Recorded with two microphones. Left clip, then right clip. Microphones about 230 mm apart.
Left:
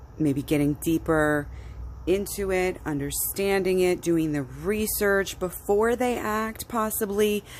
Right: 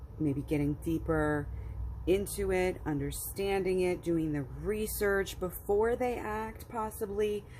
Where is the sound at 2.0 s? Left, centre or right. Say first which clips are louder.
Left 5 dB; centre.